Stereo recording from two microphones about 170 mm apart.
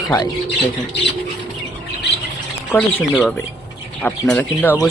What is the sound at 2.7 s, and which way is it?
Speech, 10° left (ahead or behind).